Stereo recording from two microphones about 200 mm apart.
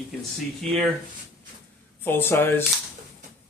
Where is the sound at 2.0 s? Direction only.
10° left (ahead or behind).